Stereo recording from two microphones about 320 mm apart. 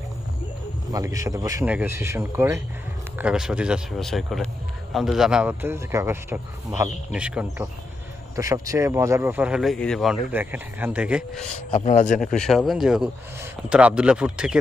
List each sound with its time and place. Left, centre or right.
0.9 s speech: centre
11.7 s a man's voice: left
12.4 s speech: centre